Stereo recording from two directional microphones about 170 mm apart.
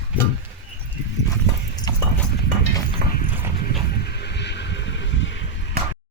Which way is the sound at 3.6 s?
70° left (ahead or behind).